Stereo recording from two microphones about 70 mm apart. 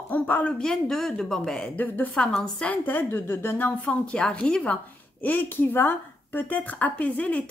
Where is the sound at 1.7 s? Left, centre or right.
Left.